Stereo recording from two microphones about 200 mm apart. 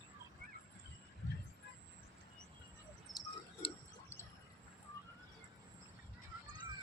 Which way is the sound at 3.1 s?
30° left (ahead or behind).